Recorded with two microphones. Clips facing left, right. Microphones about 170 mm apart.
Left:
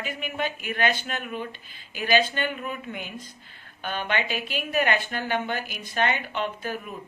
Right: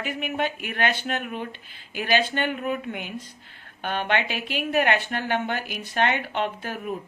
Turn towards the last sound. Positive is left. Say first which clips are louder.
# right 2 dB
turn(degrees=-60)  # may be behind; listen again after turning